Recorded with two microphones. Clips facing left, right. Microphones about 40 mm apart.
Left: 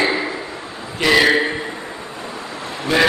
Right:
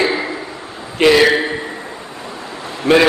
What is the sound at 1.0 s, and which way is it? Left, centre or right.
Speech, right.